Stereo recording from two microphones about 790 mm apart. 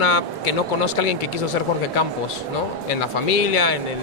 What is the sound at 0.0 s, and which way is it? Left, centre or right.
Speech, left.